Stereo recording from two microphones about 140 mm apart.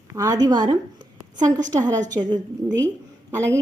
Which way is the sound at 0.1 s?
25° right (ahead or behind).